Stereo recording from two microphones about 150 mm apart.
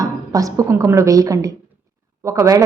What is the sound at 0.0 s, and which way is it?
A woman's voice, 25° right (ahead or behind).